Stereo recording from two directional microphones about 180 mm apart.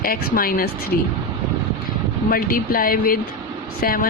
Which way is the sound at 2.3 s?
55° left (ahead or behind).